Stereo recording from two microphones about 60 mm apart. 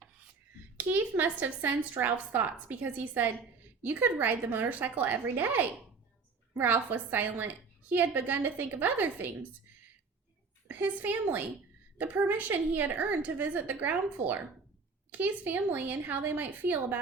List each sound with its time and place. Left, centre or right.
0.8 s a woman's voice: right
10.7 s a woman's voice: right